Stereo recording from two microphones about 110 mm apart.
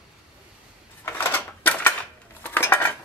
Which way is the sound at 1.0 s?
20° left (ahead or behind).